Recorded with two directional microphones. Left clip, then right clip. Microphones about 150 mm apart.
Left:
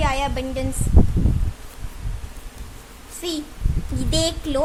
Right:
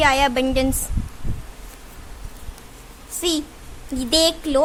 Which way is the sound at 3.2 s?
35° right (ahead or behind).